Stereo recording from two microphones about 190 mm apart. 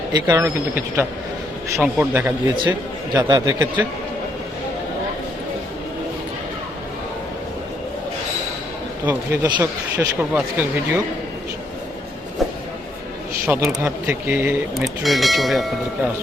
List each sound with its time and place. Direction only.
0.1 s speech: 20° right (ahead or behind)
1.7 s speech: 10° right (ahead or behind)
3.2 s speech: 20° right (ahead or behind)
9.0 s speech: 10° right (ahead or behind)
13.5 s speech: 15° right (ahead or behind)
15.0 s speech: centre (ahead or behind)